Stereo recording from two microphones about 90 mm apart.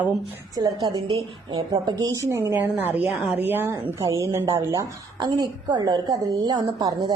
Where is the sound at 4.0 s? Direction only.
35° right (ahead or behind).